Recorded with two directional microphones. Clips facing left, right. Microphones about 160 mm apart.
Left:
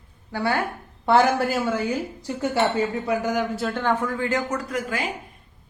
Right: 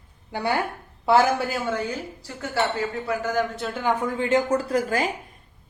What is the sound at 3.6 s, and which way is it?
Speech, 10° right (ahead or behind).